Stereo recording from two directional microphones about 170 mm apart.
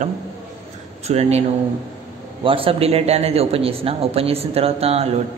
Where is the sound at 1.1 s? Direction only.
40° right (ahead or behind).